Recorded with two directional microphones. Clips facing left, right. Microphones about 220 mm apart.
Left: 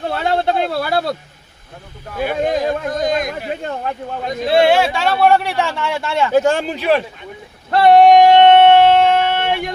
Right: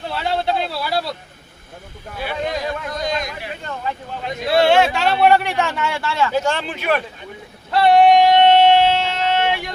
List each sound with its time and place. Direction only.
0.0 s a sound: 50° left (ahead or behind)
2.1 s speech: 45° left (ahead or behind)
4.4 s speech: 25° left (ahead or behind)
4.7 s speech: 5° left (ahead or behind)
6.1 s speech: 25° left (ahead or behind)
6.3 s speech: 50° left (ahead or behind); by 7.0 s 35° left (ahead or behind)
7.7 s a sound: 45° left (ahead or behind)